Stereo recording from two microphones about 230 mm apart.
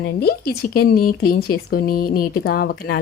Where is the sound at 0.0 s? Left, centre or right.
Left.